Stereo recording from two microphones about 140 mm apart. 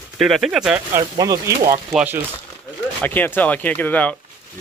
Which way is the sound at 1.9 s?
10° right (ahead or behind).